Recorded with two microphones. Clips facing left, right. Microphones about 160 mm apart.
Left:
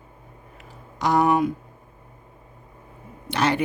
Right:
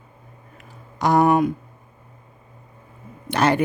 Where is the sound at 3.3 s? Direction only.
50° right (ahead or behind).